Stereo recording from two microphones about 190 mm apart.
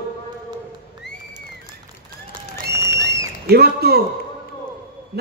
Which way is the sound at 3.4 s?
55° right (ahead or behind).